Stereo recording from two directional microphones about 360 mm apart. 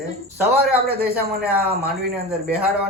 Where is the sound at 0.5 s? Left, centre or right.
Right.